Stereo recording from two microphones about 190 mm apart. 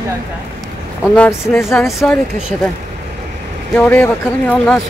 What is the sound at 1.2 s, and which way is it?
Speech, 15° left (ahead or behind).